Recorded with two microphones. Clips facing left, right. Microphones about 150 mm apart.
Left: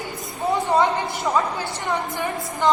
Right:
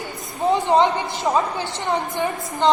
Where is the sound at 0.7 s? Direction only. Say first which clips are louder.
Right 2 dB; 20° right (ahead or behind).